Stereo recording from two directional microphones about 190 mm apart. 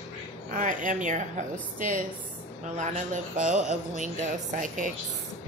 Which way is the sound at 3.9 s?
40° right (ahead or behind).